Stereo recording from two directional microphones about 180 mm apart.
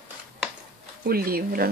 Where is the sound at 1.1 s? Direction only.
55° right (ahead or behind).